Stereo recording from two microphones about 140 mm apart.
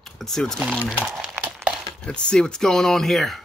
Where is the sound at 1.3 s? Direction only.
10° right (ahead or behind).